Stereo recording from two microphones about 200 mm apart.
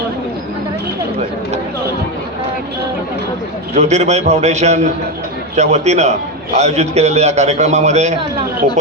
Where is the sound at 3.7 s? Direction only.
35° right (ahead or behind).